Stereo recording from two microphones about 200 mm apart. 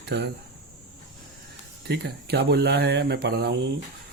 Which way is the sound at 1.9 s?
55° right (ahead or behind).